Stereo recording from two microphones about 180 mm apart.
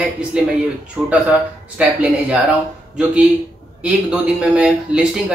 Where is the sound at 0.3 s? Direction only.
5° right (ahead or behind).